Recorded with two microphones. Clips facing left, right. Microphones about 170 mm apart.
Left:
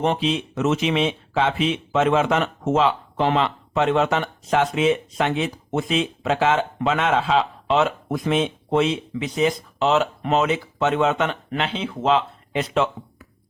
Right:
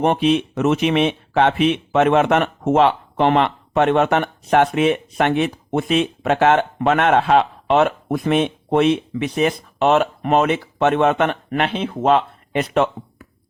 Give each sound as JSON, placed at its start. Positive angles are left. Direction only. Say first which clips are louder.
{"t": 0.0, "sound": "speech", "louder": "right 5 dB", "side_deg": -55}